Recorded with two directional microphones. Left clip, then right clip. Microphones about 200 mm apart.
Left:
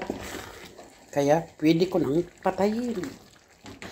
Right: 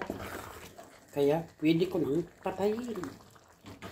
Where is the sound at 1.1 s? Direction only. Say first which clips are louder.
Left 6 dB; 25° left (ahead or behind).